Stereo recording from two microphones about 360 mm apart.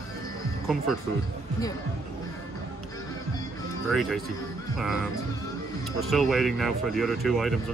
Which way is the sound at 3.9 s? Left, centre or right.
Centre.